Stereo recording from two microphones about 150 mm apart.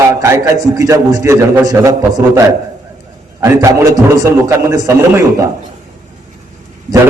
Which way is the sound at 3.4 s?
20° right (ahead or behind).